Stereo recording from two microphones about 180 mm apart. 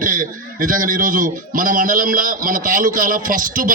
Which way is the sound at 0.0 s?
50° right (ahead or behind).